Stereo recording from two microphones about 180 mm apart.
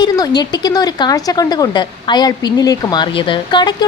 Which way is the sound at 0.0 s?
20° left (ahead or behind).